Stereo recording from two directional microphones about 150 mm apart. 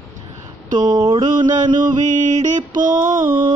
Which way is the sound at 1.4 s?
55° right (ahead or behind).